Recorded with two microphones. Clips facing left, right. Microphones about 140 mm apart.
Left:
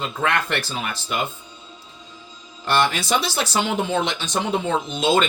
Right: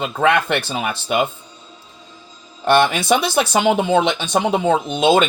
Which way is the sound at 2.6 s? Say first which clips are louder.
Right 6 dB; 60° right (ahead or behind).